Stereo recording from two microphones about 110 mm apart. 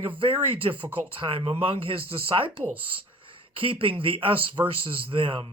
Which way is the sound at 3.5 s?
55° right (ahead or behind).